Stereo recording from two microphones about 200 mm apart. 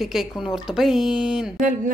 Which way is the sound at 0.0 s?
Centre (ahead or behind).